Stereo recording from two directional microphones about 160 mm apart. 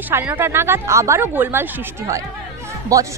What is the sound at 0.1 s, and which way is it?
A woman's voice, 10° right (ahead or behind).